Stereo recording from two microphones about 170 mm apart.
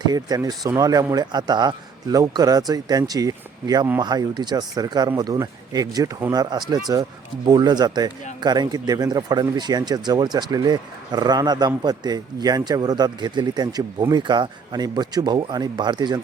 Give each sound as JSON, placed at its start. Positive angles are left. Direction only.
{"t": 0.0, "sound": "speech", "side_deg": -25}